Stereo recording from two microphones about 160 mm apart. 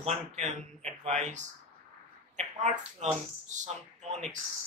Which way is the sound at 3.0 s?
50° right (ahead or behind).